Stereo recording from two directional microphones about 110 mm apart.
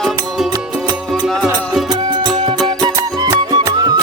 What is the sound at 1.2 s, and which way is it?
Music, 5° right (ahead or behind).